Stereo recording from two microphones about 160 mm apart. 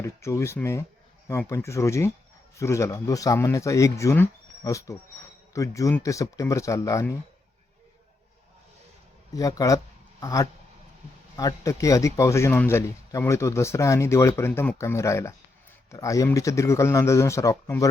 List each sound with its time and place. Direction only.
0.0 s speech: 20° left (ahead or behind)
9.3 s speech: 20° left (ahead or behind)